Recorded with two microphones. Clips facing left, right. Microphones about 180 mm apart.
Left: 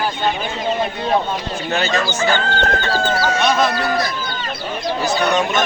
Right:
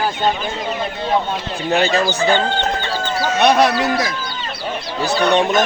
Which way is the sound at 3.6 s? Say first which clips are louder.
Right 2 dB; 90° right.